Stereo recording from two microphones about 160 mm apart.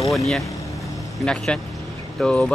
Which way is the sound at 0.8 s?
Centre (ahead or behind).